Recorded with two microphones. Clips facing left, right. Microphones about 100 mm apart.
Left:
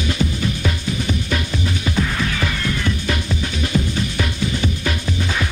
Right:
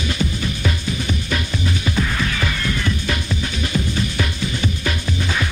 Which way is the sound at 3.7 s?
20° left (ahead or behind).